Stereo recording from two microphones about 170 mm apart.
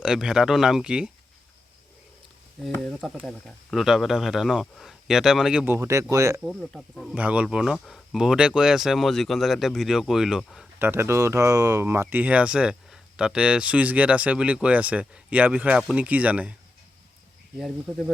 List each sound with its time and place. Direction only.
0.0 s speech: 5° right (ahead or behind)
2.6 s speech: 5° left (ahead or behind)
5.6 s speech: 15° right (ahead or behind)
6.4 s speech: centre (ahead or behind)
10.8 s speech: 15° right (ahead or behind)
17.6 s speech: centre (ahead or behind)